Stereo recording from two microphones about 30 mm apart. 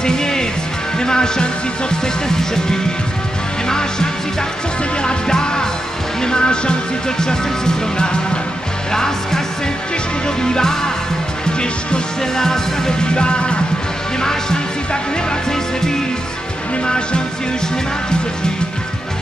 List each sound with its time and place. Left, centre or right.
0.0 s music: left
12.4 s music: centre
13.1 s music: left
16.8 s music: left